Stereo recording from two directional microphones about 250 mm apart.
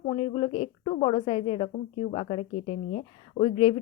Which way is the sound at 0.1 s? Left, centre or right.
Left.